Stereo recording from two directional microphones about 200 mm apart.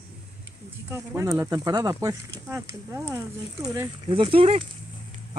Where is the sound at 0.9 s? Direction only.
15° right (ahead or behind).